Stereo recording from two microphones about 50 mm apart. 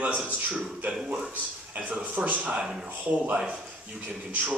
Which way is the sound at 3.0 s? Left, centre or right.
Right.